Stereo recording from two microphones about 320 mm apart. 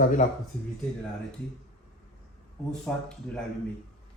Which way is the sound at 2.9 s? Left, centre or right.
Centre.